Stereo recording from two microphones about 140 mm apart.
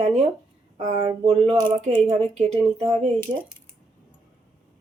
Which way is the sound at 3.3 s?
35° right (ahead or behind).